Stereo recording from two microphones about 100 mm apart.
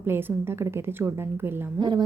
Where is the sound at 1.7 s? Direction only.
50° right (ahead or behind).